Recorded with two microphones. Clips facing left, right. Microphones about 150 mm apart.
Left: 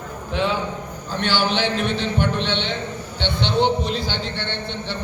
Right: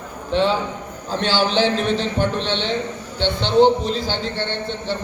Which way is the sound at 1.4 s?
35° right (ahead or behind).